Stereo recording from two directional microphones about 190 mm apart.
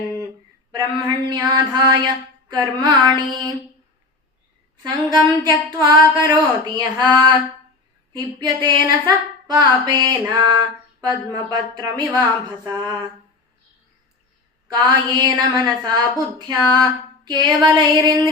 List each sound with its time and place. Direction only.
0.8 s a woman's voice: 20° right (ahead or behind)
5.4 s a woman's voice: 20° right (ahead or behind)
14.7 s a woman's voice: 20° right (ahead or behind)